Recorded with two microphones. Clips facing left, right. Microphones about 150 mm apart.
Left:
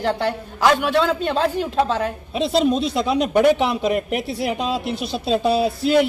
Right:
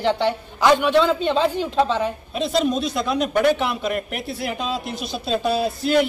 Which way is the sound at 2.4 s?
30° left (ahead or behind).